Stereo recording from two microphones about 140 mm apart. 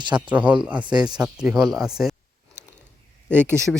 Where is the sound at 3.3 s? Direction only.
15° right (ahead or behind).